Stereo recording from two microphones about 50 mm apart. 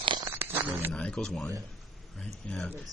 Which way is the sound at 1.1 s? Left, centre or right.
Centre.